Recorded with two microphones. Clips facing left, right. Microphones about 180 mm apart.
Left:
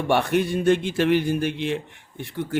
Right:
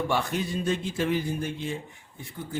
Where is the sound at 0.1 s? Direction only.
65° left (ahead or behind).